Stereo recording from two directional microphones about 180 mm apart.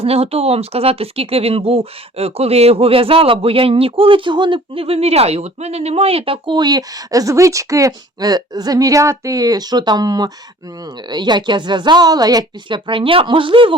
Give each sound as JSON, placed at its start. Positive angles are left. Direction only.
{"t": 0.0, "sound": "speech", "side_deg": -35}